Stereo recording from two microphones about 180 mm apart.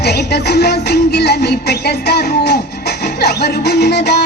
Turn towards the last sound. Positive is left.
turn(degrees=65)  # may be behind; listen again after turning